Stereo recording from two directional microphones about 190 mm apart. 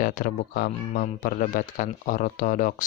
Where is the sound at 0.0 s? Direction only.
45° left (ahead or behind).